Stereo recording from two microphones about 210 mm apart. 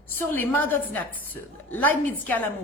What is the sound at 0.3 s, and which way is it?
A woman's voice, 10° left (ahead or behind).